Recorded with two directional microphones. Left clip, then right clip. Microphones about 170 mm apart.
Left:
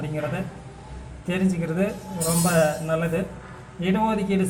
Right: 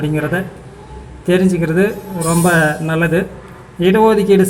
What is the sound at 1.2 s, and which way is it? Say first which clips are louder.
A man's voice: right 12 dB; 25° right (ahead or behind).